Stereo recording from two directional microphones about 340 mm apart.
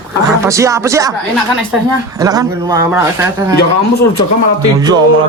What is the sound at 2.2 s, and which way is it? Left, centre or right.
Speech, centre.